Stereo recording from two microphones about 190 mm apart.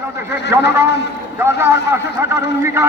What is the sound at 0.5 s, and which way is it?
A man's voice, 10° right (ahead or behind).